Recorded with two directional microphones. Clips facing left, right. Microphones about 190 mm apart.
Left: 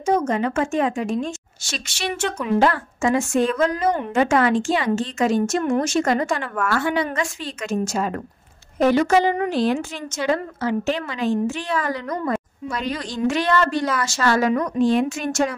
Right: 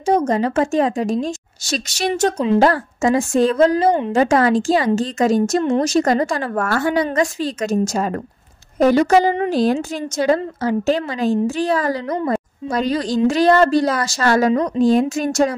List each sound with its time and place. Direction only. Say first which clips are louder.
0.0 s a woman's voice: right 3 dB; 35° right (ahead or behind)